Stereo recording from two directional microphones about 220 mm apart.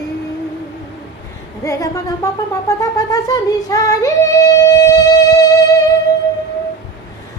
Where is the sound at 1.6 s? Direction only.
15° left (ahead or behind).